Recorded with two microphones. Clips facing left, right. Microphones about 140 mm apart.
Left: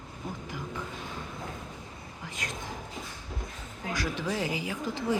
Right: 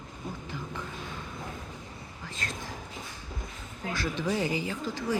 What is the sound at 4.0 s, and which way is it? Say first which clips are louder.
Speech: right 2 dB; 5° left (ahead or behind).